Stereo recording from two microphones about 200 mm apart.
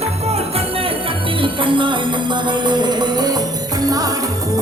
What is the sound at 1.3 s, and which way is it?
Music, 25° right (ahead or behind).